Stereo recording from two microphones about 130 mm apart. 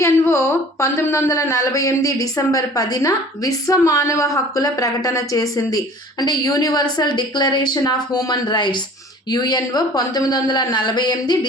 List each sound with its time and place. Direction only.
0.0 s speech: 20° left (ahead or behind)